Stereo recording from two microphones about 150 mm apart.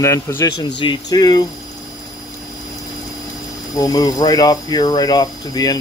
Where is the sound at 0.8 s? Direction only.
30° left (ahead or behind).